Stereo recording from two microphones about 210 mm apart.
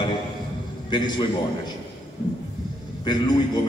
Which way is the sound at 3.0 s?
20° left (ahead or behind).